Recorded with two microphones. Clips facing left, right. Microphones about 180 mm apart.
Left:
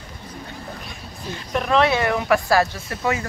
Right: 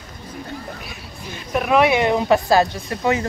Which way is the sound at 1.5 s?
10° right (ahead or behind).